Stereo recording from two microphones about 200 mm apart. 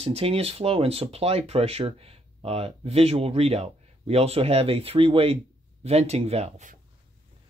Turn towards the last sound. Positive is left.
turn(degrees=-35)  # may be behind; listen again after turning